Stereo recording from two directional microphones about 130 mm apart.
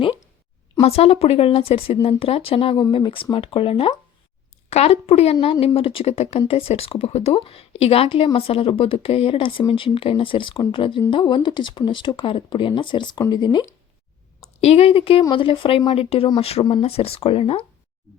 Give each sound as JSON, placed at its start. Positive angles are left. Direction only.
{"t": 0.8, "sound": "a woman's voice", "side_deg": 50}
{"t": 14.6, "sound": "a woman's voice", "side_deg": 50}